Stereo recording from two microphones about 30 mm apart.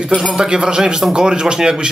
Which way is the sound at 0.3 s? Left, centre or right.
Right.